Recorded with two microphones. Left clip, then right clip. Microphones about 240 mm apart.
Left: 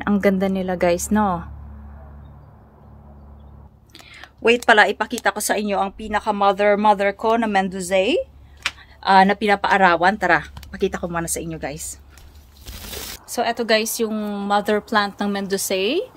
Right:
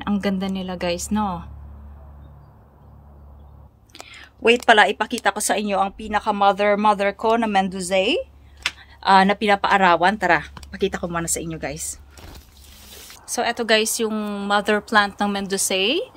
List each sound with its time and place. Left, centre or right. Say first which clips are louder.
0.0 s a woman's voice: left 6 dB; centre
3.9 s speech: right 1 dB; centre
13.3 s speech: even; centre